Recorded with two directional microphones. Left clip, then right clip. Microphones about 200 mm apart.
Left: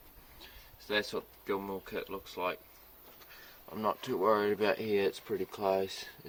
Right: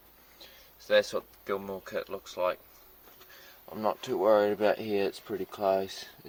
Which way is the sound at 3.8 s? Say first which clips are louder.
Right 3 dB; 25° right (ahead or behind).